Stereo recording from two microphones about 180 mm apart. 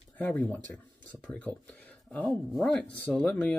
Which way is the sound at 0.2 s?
5° left (ahead or behind).